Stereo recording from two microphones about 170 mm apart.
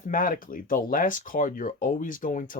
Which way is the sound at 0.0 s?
55° left (ahead or behind).